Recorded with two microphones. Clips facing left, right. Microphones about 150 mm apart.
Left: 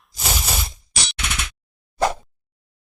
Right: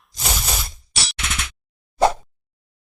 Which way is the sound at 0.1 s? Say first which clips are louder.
Left 1 dB; 5° left (ahead or behind).